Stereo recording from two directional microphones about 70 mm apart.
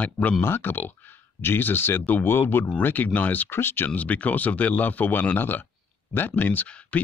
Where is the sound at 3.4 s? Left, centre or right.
Left.